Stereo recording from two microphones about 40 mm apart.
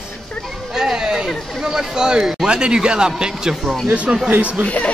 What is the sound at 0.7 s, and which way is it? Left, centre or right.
A man's voice, centre.